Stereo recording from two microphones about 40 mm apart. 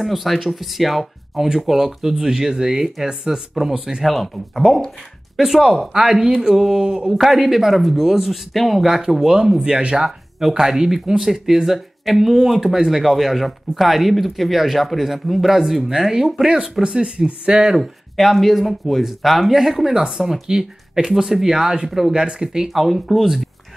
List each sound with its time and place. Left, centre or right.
0.0 s speech: centre
1.5 s speech: centre
3.7 s speech: right
4.0 s speech: centre
7.2 s speech: centre
9.3 s speech: centre
16.4 s speech: right
17.7 s speech: centre
22.7 s speech: centre